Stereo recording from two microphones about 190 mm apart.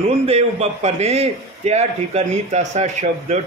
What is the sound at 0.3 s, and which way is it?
A man's voice, 35° right (ahead or behind).